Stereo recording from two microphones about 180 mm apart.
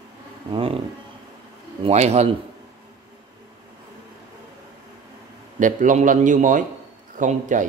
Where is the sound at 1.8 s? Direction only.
35° right (ahead or behind).